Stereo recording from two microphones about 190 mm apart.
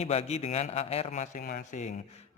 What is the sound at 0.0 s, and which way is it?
A man's voice, 35° left (ahead or behind).